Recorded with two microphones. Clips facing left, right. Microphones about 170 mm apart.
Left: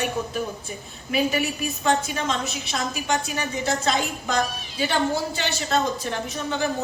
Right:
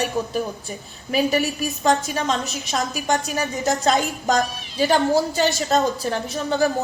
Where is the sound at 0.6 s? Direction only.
40° right (ahead or behind).